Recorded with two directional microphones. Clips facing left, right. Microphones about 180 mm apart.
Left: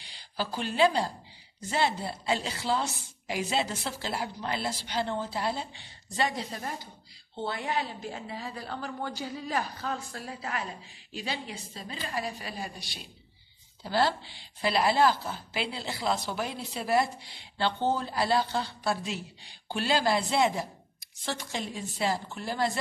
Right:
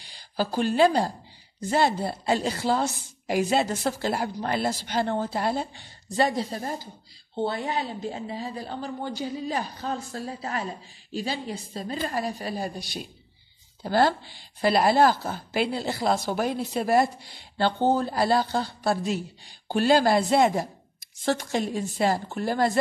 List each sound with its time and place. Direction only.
0.0 s a woman's voice: 45° right (ahead or behind)